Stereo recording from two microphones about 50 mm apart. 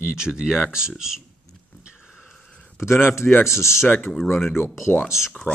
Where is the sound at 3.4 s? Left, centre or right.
Left.